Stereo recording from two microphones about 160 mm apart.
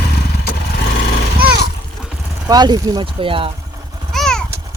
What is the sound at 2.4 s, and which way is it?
Speech, 25° right (ahead or behind).